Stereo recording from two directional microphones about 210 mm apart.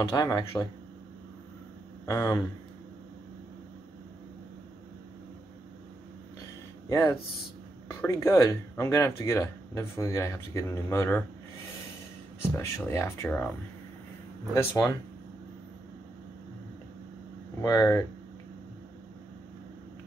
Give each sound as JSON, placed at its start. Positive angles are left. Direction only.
{"t": 0.0, "sound": "speech", "side_deg": 15}
{"t": 2.0, "sound": "speech", "side_deg": 15}
{"t": 6.9, "sound": "speech", "side_deg": 15}
{"t": 12.5, "sound": "speech", "side_deg": 10}
{"t": 14.5, "sound": "speech", "side_deg": 10}
{"t": 17.6, "sound": "speech", "side_deg": 15}